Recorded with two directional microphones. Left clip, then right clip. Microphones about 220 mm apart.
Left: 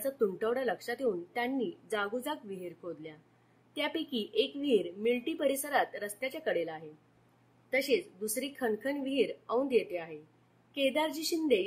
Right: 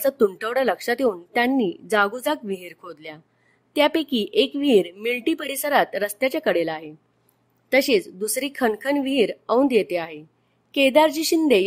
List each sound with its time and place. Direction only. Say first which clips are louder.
0.0 s a woman's voice: right 11 dB; 50° right (ahead or behind)